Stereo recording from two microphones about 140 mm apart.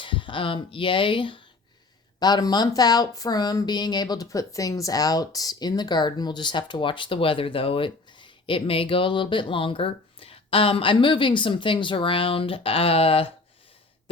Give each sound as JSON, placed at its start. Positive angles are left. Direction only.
{"t": 0.0, "sound": "a woman's voice", "side_deg": 35}